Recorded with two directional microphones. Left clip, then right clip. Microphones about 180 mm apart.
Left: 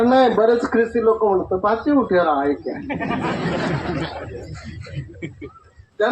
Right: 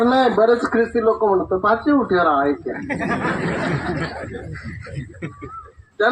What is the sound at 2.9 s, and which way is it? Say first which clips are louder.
Speech: right 2 dB; 50° right (ahead or behind).